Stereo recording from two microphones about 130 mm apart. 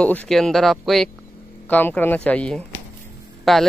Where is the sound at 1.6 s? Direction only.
10° left (ahead or behind).